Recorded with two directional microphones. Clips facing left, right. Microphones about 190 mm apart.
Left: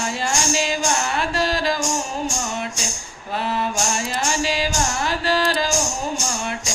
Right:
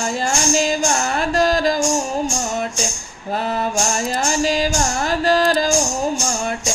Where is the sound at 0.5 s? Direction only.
40° right (ahead or behind).